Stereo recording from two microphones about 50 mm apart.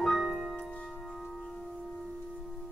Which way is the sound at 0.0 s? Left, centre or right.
Centre.